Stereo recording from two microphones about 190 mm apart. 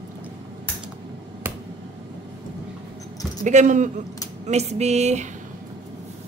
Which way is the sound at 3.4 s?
40° right (ahead or behind).